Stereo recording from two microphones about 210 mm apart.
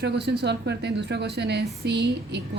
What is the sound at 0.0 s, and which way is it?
A woman's voice, 55° right (ahead or behind).